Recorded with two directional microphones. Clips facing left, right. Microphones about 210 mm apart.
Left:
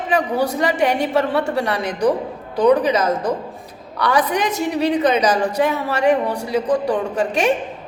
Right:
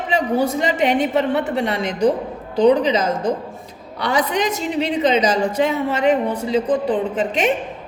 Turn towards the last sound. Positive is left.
turn(degrees=-20)  # may be behind; listen again after turning